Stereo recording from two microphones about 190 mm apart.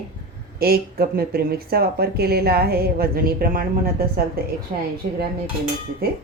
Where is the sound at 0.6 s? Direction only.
55° right (ahead or behind).